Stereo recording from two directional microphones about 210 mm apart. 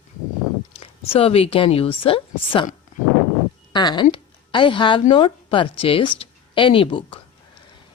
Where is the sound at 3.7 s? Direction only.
20° left (ahead or behind).